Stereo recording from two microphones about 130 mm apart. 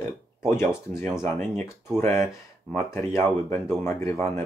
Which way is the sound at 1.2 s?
15° left (ahead or behind).